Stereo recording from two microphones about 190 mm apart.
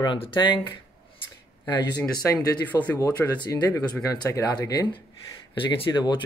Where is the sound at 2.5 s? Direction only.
10° left (ahead or behind).